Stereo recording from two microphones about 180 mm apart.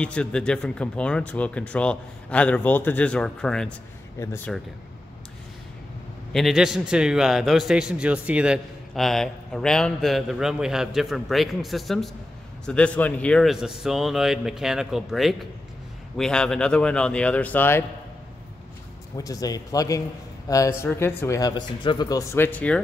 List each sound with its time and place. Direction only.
0.0 s a man's voice: 5° left (ahead or behind)
6.3 s a man's voice: centre (ahead or behind)
19.1 s speech: 20° left (ahead or behind)